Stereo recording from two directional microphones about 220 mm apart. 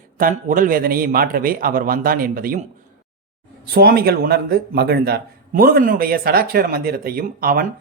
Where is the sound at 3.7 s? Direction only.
45° right (ahead or behind).